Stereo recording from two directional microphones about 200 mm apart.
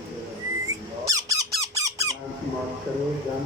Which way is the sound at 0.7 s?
15° right (ahead or behind).